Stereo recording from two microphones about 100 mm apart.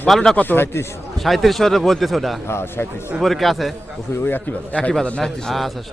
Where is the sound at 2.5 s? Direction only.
25° left (ahead or behind).